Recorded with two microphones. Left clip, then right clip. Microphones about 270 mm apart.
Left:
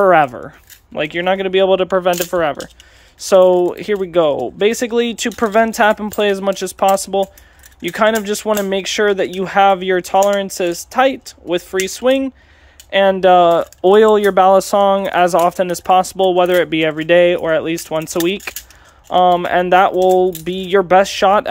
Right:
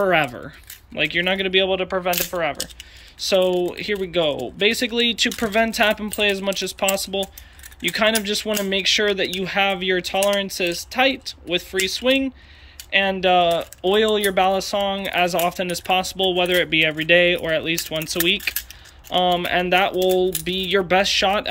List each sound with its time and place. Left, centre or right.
0.0 s speech: centre